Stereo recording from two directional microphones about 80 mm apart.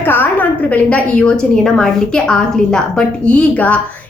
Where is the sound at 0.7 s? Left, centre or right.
Centre.